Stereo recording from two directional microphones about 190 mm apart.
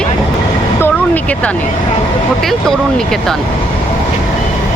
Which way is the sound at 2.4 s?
Centre (ahead or behind).